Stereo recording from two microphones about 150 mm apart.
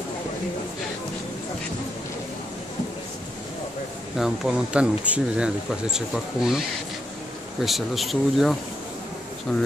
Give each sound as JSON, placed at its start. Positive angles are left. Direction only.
{"t": 4.2, "sound": "speech", "side_deg": -5}
{"t": 7.6, "sound": "speech", "side_deg": 0}